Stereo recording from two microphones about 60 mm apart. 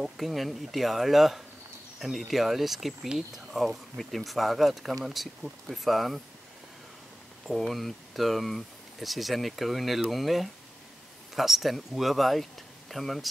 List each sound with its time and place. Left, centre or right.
0.0 s speech: centre
7.4 s speech: centre